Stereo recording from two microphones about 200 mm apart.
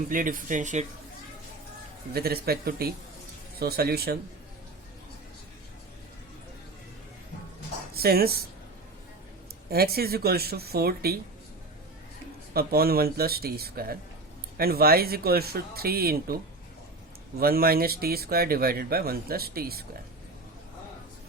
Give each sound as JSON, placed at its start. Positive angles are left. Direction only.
{"t": 0.1, "sound": "speech", "side_deg": -45}
{"t": 2.1, "sound": "speech", "side_deg": -50}
{"t": 7.9, "sound": "speech", "side_deg": -50}
{"t": 9.6, "sound": "speech", "side_deg": -50}
{"t": 12.5, "sound": "speech", "side_deg": -50}
{"t": 17.4, "sound": "speech", "side_deg": -50}